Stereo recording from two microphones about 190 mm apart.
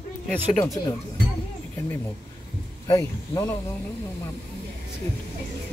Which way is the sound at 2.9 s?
15° left (ahead or behind).